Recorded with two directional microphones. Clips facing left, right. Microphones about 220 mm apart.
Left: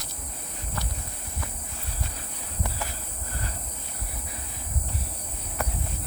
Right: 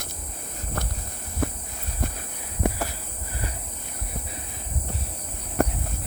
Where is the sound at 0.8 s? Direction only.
50° right (ahead or behind).